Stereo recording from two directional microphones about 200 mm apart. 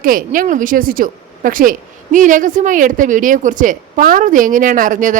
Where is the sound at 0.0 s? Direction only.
45° right (ahead or behind).